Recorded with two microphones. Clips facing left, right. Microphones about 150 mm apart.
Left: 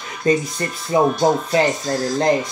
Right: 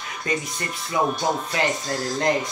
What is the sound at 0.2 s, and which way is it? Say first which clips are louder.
Speech: left 9 dB; 35° left (ahead or behind).